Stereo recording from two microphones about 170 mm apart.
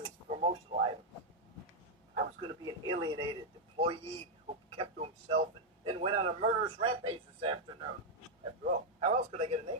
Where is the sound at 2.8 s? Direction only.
25° right (ahead or behind).